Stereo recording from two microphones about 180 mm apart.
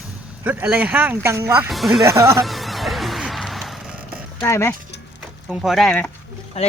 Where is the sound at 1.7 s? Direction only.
Centre (ahead or behind).